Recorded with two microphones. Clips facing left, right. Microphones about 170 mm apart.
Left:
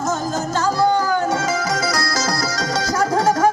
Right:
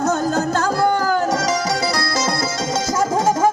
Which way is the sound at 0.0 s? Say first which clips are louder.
Right 4 dB; 60° right (ahead or behind).